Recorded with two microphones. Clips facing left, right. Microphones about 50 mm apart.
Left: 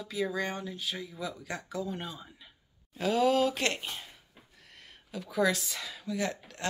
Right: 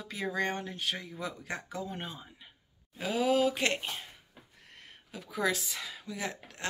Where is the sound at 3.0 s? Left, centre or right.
Centre.